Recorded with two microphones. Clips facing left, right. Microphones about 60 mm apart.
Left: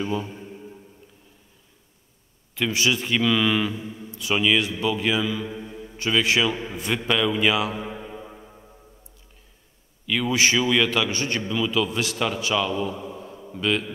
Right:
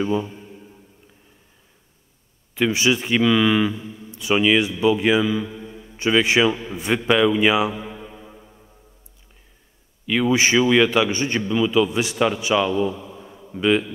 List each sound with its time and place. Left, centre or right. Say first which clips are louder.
0.0 s a man's voice: right 5 dB; centre
0.3 s a sound: left 1 dB; centre
2.5 s a man's voice: right 4 dB; right
3.7 s a man's voice: even; left
4.1 s a man's voice: right 4 dB; right
5.5 s mantra: left 1 dB; centre
5.9 s a man's voice: right 4 dB; right
7.8 s music: left 1 dB; centre
10.0 s a man's voice: right 3 dB; centre
12.9 s mantra: left 2 dB; centre
13.6 s a man's voice: right 6 dB; centre